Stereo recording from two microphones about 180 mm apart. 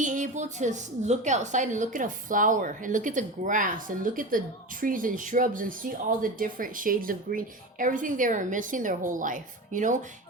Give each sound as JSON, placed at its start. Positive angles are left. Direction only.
{"t": 0.0, "sound": "a woman's voice", "side_deg": -45}